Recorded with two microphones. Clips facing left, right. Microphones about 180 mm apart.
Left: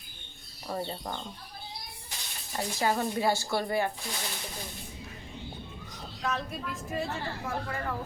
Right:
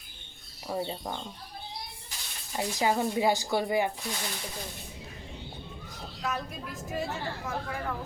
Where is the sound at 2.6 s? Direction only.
15° right (ahead or behind).